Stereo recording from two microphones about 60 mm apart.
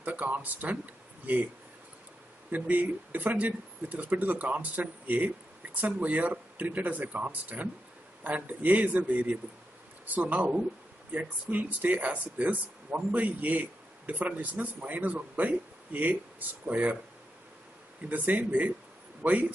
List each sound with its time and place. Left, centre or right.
0.0 s speech: right
2.5 s speech: right
18.0 s speech: right